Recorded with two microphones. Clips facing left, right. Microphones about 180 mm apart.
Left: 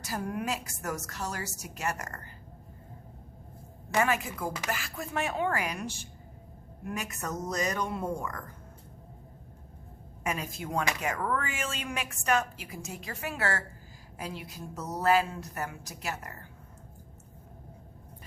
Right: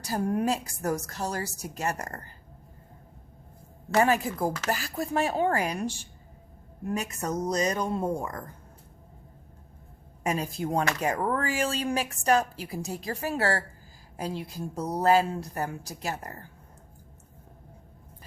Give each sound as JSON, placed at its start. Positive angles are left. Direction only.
{"t": 0.0, "sound": "a woman's voice", "side_deg": -35}
{"t": 3.9, "sound": "a woman's voice", "side_deg": -35}
{"t": 7.3, "sound": "speech", "side_deg": -20}
{"t": 7.7, "sound": "a woman's voice", "side_deg": -35}
{"t": 10.2, "sound": "a woman's voice", "side_deg": -35}